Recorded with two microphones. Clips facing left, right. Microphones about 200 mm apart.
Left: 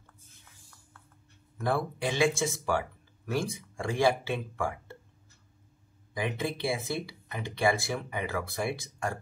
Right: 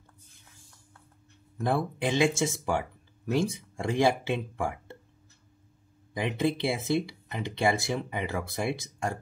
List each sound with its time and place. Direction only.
1.6 s speech: 20° right (ahead or behind)
6.1 s speech: 20° right (ahead or behind)